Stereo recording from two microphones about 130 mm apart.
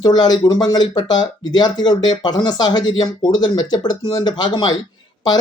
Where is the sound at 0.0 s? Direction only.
30° left (ahead or behind).